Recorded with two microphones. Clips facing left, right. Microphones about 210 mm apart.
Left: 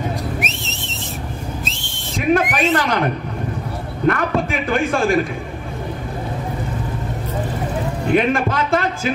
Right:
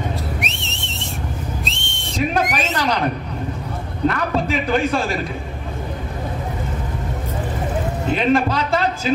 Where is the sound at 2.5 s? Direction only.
50° left (ahead or behind).